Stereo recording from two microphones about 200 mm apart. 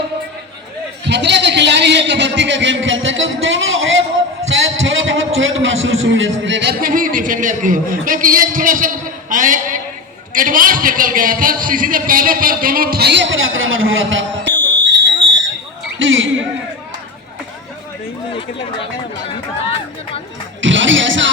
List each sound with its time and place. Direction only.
1.0 s a man's voice: 60° right (ahead or behind)
15.3 s fire alarm: 65° right (ahead or behind)
16.0 s a sound: 70° right (ahead or behind)
20.6 s music: 70° right (ahead or behind)